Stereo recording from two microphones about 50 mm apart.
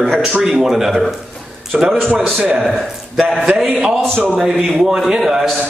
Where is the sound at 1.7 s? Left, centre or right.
Right.